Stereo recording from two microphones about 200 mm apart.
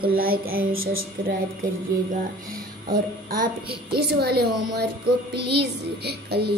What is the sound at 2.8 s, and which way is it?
A child's voice, 45° right (ahead or behind).